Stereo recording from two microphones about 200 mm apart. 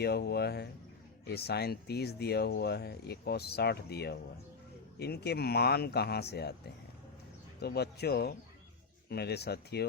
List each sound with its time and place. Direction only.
0.0 s speech: 55° left (ahead or behind)
7.6 s speech: 55° left (ahead or behind)